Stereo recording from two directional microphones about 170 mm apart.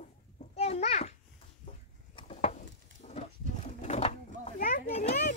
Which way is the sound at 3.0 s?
40° left (ahead or behind).